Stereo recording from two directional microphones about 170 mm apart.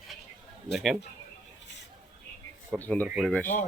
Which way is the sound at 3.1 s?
Centre (ahead or behind).